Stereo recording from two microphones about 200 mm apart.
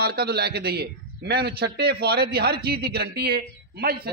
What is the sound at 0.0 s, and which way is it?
A man's voice, 50° right (ahead or behind).